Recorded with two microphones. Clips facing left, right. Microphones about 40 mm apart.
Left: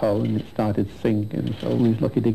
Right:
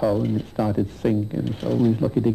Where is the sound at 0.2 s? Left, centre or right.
Left.